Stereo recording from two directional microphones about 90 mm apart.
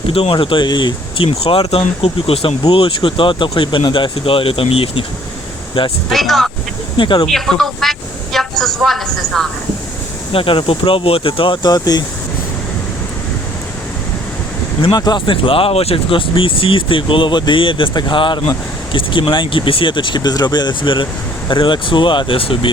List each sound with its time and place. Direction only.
0.1 s speech: 80° left; by 0.9 s 55° left (ahead or behind)
1.2 s speech: 90° left
6.1 s speech: centre (ahead or behind)
6.9 s speech: 65° left (ahead or behind)
7.3 s a man's voice: 5° left (ahead or behind)
10.3 s speech: 75° left (ahead or behind)
11.6 s speech: 50° left (ahead or behind)
14.9 s speech: 45° left (ahead or behind)
15.3 s speech: 85° left